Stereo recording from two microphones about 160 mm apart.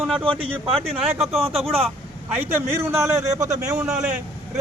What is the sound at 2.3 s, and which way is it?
A man's voice, 10° right (ahead or behind).